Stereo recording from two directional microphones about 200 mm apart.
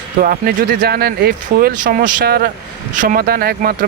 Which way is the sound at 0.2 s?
50° right (ahead or behind).